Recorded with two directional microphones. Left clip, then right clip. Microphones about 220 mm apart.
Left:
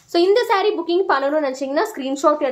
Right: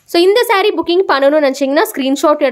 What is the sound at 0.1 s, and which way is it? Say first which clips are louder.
Speech: right 5 dB; 40° right (ahead or behind).